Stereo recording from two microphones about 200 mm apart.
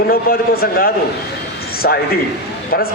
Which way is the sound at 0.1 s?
50° left (ahead or behind).